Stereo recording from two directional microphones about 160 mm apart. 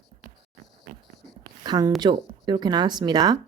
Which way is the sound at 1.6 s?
25° right (ahead or behind).